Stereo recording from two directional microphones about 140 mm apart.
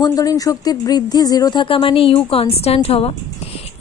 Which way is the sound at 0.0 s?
25° left (ahead or behind).